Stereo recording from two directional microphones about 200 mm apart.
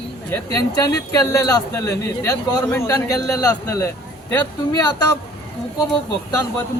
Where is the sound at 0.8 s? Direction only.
20° left (ahead or behind).